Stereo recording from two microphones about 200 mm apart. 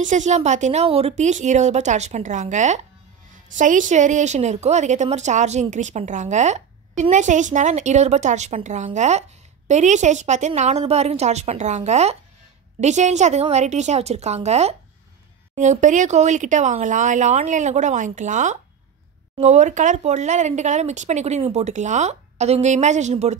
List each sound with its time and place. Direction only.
0.0 s a woman's voice: 35° right (ahead or behind)